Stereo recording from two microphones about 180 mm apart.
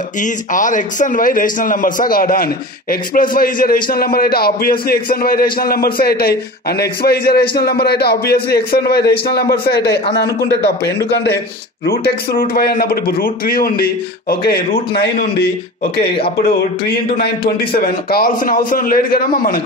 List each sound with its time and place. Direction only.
0.2 s a man's voice: 45° left (ahead or behind); by 10.5 s 65° left (ahead or behind)
11.8 s a man's voice: 60° left (ahead or behind)